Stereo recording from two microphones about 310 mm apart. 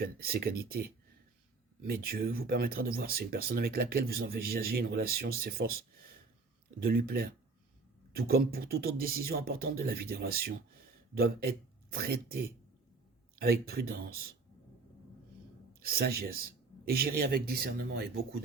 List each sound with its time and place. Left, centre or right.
0.0 s speech: right
6.8 s speech: right
15.7 s a man's voice: right